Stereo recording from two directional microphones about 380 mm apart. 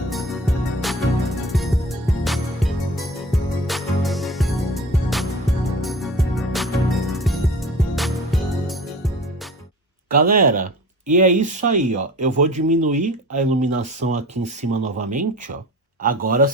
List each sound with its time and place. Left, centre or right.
0.1 s music: centre
10.1 s speech: right